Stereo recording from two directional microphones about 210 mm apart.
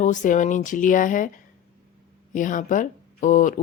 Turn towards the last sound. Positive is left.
turn(degrees=35)  # may be behind; listen again after turning